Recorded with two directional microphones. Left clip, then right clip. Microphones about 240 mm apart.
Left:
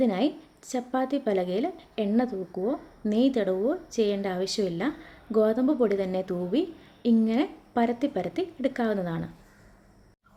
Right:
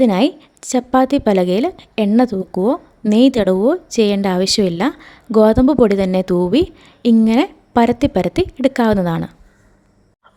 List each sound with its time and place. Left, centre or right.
0.0 s a woman's voice: right